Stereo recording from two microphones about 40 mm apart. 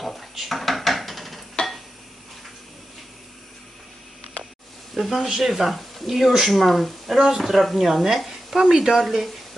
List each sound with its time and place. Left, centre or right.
0.0 s dishes: centre
1.6 s a sound: left
4.9 s a woman's voice: centre
5.6 s a woman's voice: centre